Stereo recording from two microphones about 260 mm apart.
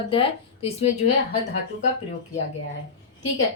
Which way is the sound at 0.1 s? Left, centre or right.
Left.